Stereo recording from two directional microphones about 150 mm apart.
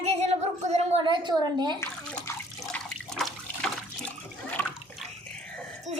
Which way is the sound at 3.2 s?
Centre (ahead or behind).